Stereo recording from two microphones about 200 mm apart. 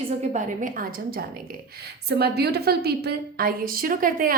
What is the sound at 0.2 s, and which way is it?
A woman's voice, 40° right (ahead or behind).